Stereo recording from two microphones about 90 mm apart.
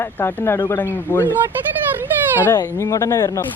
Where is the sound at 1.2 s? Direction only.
20° right (ahead or behind).